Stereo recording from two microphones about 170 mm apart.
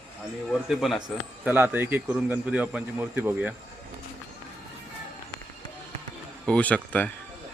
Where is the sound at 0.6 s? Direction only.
Centre (ahead or behind).